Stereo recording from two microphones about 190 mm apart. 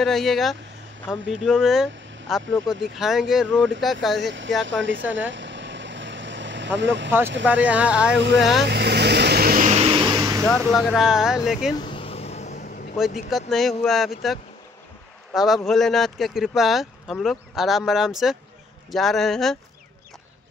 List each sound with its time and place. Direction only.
0.0 s speech: centre (ahead or behind)
4.6 s speech: 80° right
5.3 s vehicle: 75° right (ahead or behind)
6.8 s speech: 70° right (ahead or behind)
7.4 s speech: 5° right (ahead or behind)
8.6 s vehicle: 60° right (ahead or behind); by 10.4 s 20° right (ahead or behind)
10.7 s speech: centre (ahead or behind)
11.7 s vehicle: 25° left (ahead or behind)
12.9 s speech: centre (ahead or behind)